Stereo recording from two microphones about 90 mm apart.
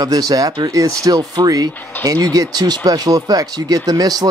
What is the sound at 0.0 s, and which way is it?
Speech, 45° right (ahead or behind).